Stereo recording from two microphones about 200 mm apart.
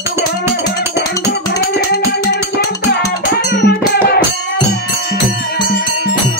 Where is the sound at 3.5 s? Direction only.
50° left (ahead or behind).